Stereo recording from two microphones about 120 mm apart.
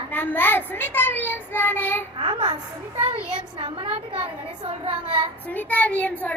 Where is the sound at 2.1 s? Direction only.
40° right (ahead or behind).